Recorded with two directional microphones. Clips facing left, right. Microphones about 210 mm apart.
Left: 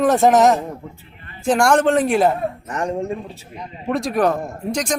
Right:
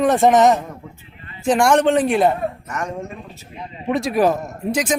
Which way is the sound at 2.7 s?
30° left (ahead or behind).